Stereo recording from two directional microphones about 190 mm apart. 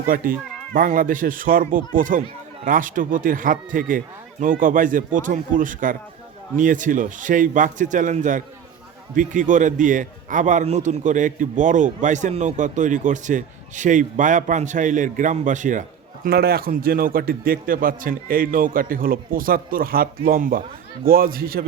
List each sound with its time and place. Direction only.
0.1 s a man's voice: 45° right (ahead or behind)
16.2 s a man's voice: 55° right (ahead or behind)